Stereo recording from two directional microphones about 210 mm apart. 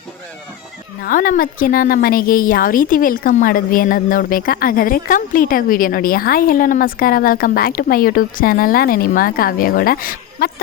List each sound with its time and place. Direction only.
1.0 s a woman's voice: 40° left (ahead or behind)